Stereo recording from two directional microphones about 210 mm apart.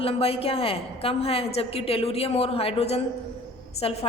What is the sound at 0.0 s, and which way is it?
A woman's voice, 30° left (ahead or behind).